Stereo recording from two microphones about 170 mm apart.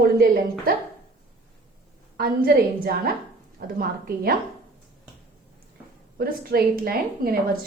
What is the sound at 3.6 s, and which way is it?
Speech, 65° right (ahead or behind).